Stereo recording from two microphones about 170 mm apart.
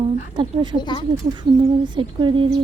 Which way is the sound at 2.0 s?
30° right (ahead or behind).